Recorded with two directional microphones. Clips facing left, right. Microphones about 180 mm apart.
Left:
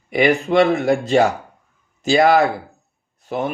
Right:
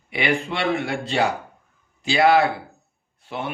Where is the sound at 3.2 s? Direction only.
45° left (ahead or behind).